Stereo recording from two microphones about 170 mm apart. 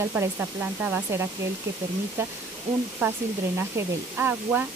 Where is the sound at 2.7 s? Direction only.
40° right (ahead or behind).